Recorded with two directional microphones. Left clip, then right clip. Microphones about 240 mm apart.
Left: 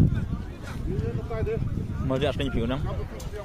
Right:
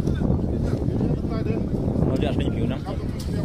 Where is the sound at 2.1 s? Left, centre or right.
Centre.